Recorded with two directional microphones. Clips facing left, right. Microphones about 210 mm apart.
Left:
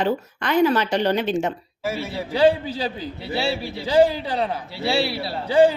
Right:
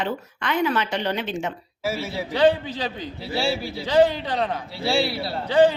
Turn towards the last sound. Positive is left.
turn(degrees=5)  # may be behind; listen again after turning